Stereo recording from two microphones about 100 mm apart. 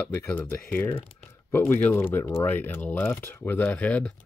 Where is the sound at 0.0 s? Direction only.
20° left (ahead or behind).